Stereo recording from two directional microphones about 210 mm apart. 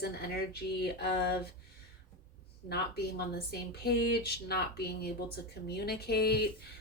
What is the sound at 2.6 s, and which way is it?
Speech, 50° left (ahead or behind).